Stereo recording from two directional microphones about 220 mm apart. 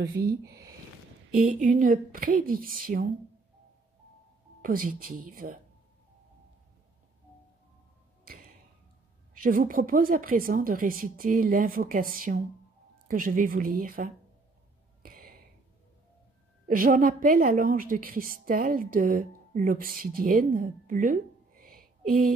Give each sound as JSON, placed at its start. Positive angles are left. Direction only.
{"t": 0.0, "sound": "speech", "side_deg": -45}
{"t": 1.6, "sound": "a woman's voice", "side_deg": -35}
{"t": 4.6, "sound": "a woman's voice", "side_deg": -40}
{"t": 9.4, "sound": "a woman's voice", "side_deg": -40}
{"t": 15.0, "sound": "a sound", "side_deg": -40}
{"t": 16.6, "sound": "a woman's voice", "side_deg": -40}